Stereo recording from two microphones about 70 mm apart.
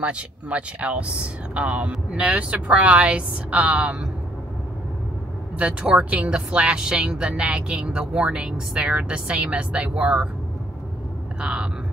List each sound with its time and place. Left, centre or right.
0.0 s a woman's voice: centre
5.6 s a woman's voice: centre
11.3 s a woman's voice: centre